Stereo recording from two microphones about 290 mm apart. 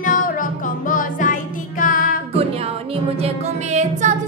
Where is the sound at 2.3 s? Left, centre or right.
Right.